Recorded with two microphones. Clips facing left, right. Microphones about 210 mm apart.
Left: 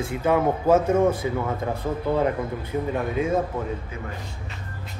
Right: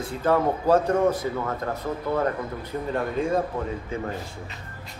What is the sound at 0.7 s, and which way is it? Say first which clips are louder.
Speech: left 1 dB; 5° left (ahead or behind).